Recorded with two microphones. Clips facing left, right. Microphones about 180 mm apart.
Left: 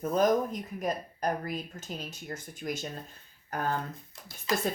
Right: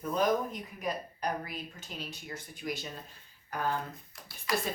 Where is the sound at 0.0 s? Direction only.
45° left (ahead or behind).